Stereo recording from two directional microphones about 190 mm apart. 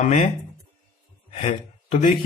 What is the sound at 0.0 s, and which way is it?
Speech, 40° left (ahead or behind).